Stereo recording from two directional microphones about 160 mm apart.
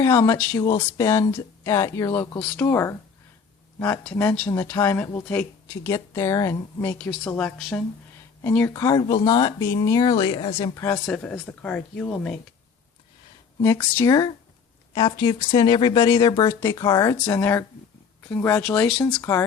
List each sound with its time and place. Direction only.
0.0 s speech: 15° left (ahead or behind)
7.0 s speech: 10° left (ahead or behind)
8.4 s speech: 15° left (ahead or behind); by 10.7 s 30° left (ahead or behind)
10.8 s speech: 20° left (ahead or behind)
11.0 s speech: 5° left (ahead or behind)
13.9 s speech: 20° left (ahead or behind); by 19.0 s 5° left (ahead or behind)